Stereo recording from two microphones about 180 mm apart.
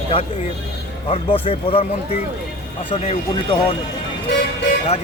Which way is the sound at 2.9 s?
30° left (ahead or behind).